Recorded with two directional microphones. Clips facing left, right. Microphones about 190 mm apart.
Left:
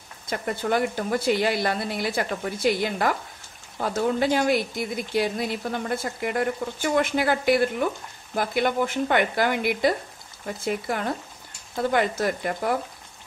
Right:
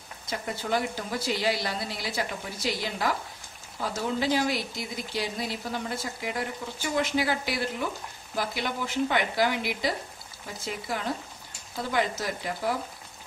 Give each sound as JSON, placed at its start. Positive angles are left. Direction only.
{"t": 0.3, "sound": "speech", "side_deg": 55}